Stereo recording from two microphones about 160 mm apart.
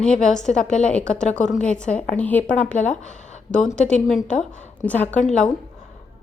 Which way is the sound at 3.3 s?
50° left (ahead or behind).